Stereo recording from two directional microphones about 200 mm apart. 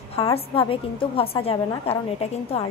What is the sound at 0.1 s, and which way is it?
A woman's voice, 25° left (ahead or behind).